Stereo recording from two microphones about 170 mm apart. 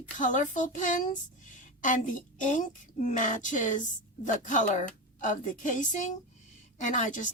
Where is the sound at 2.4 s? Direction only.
45° left (ahead or behind).